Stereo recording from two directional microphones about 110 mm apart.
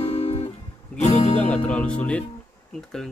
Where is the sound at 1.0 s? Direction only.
90° left.